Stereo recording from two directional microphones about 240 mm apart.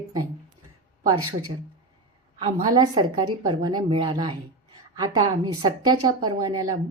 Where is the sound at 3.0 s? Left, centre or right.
Right.